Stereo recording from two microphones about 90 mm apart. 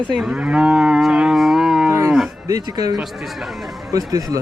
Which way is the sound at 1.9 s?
35° right (ahead or behind).